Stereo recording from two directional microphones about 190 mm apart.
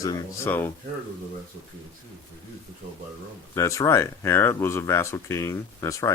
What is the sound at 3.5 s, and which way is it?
Speech, 15° left (ahead or behind).